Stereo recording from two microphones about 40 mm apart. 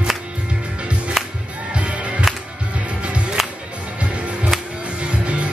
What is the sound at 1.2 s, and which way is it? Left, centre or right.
Music, centre.